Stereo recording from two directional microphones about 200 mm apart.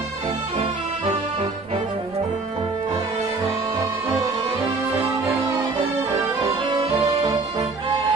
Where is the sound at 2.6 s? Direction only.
20° right (ahead or behind).